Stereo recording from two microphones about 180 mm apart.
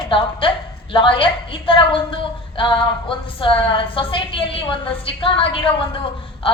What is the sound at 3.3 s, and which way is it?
A woman's voice, 30° left (ahead or behind).